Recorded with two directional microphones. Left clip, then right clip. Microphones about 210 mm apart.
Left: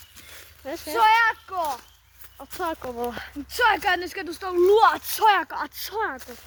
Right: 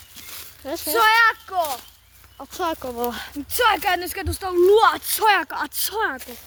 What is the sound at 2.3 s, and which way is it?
Speech, 25° right (ahead or behind).